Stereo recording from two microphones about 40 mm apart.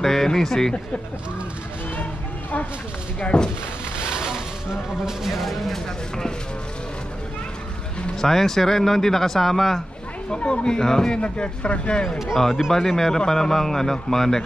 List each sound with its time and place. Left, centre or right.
0.0 s speech: centre
3.2 s speech: left
4.0 s a sound: centre
5.0 s speech: centre
8.2 s speech: centre
10.3 s speech: left
12.4 s speech: centre